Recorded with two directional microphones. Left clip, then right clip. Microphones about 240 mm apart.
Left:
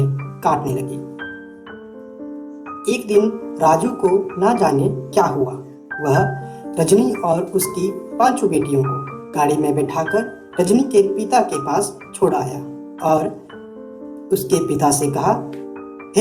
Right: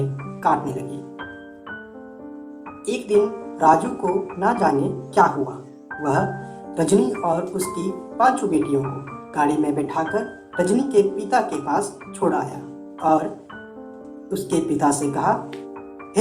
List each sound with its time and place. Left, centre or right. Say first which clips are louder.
0.4 s speech: left 2 dB; left
2.8 s speech: left 3 dB; left